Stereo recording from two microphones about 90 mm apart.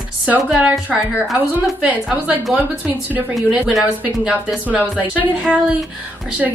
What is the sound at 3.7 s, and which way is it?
Speech, centre (ahead or behind).